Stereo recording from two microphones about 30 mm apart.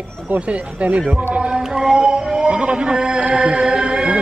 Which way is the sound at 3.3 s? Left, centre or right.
Right.